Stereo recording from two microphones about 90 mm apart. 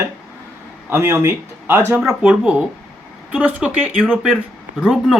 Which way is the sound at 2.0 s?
5° right (ahead or behind).